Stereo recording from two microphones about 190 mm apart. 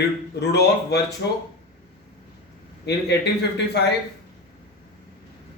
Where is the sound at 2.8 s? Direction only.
60° left (ahead or behind).